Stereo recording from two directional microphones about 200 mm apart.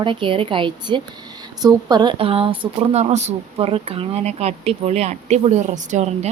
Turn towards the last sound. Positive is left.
turn(degrees=-35)  # may be behind; listen again after turning